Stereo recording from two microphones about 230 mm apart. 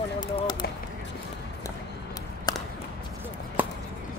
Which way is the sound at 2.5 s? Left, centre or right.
Centre.